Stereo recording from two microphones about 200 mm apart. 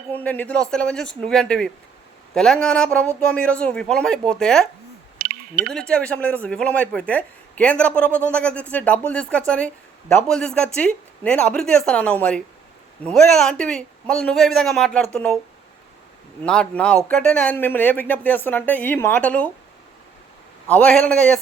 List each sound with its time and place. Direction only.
0.1 s speech: 10° left (ahead or behind)
5.1 s a sound: 45° right (ahead or behind)
5.7 s speech: 5° left (ahead or behind)
16.4 s speech: 5° left (ahead or behind)
20.7 s speech: 5° left (ahead or behind)